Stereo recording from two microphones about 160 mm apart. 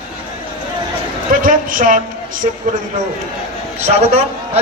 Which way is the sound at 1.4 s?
55° right (ahead or behind).